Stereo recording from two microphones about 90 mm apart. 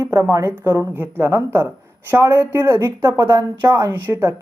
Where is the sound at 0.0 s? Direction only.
30° right (ahead or behind).